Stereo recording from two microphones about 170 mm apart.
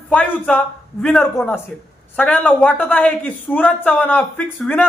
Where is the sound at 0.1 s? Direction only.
10° left (ahead or behind).